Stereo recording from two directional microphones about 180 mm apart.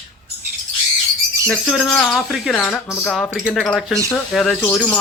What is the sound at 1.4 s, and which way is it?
Speech, centre (ahead or behind).